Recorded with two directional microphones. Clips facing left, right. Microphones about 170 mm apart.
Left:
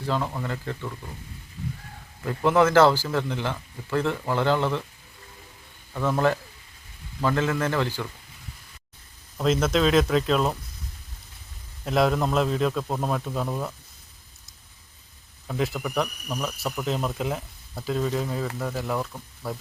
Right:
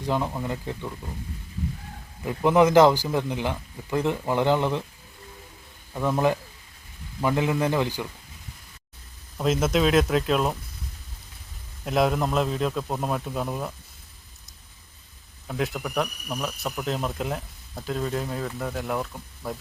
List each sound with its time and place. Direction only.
0.0 s a man's voice: 15° right (ahead or behind)
2.2 s a man's voice: 15° right (ahead or behind)
5.9 s a man's voice: 15° right (ahead or behind)
9.4 s speech: 5° right (ahead or behind)
11.9 s speech: 5° right (ahead or behind)
15.4 s speech: centre (ahead or behind)